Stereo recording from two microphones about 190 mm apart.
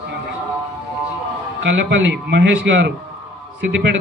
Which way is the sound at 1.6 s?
70° right (ahead or behind).